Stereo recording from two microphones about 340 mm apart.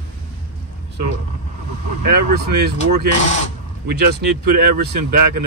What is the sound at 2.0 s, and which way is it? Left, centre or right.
Speech, right.